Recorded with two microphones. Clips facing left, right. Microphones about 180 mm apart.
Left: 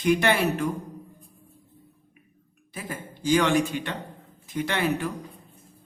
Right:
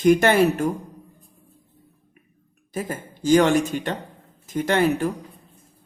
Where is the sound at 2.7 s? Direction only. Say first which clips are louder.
Right 7 dB; 45° right (ahead or behind).